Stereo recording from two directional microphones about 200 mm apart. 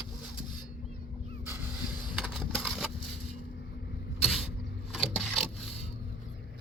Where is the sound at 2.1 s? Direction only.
Centre (ahead or behind).